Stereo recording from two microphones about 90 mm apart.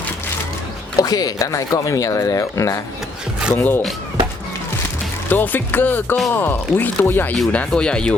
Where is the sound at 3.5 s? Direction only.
20° left (ahead or behind).